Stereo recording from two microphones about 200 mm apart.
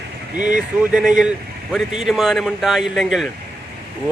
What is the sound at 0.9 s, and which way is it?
Speech, 5° right (ahead or behind).